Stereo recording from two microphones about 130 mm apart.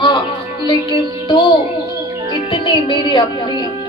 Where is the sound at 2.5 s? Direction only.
40° left (ahead or behind).